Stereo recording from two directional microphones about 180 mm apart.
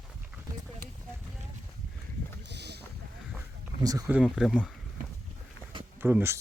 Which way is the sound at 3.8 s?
20° right (ahead or behind).